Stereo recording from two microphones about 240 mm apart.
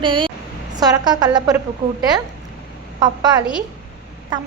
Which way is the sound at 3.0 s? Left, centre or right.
Centre.